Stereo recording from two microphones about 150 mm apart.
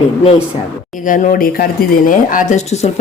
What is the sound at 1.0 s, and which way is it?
Speech, 60° left (ahead or behind).